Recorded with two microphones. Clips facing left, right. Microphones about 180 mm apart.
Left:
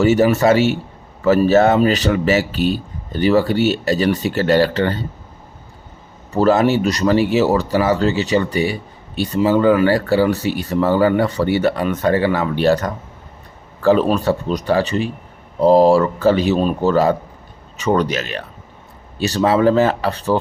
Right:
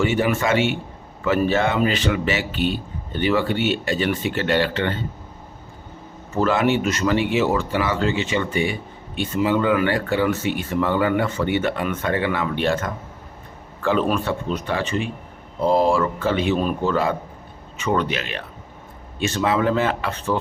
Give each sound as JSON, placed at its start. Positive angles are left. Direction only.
{"t": 0.0, "sound": "speech", "side_deg": 40}
{"t": 6.3, "sound": "speech", "side_deg": 35}